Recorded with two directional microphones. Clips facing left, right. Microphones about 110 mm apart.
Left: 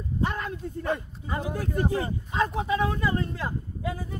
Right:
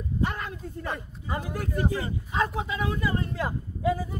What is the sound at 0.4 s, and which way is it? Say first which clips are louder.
A man's voice: left 3 dB; 30° left (ahead or behind).